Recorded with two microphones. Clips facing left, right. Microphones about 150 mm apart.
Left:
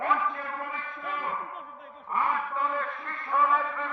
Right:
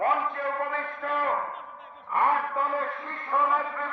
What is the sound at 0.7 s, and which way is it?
Speech, 70° right (ahead or behind).